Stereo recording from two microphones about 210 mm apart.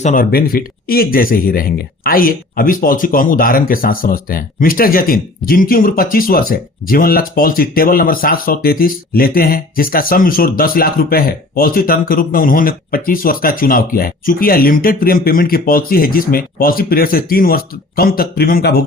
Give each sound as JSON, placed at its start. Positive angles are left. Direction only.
{"t": 0.0, "sound": "speech", "side_deg": 40}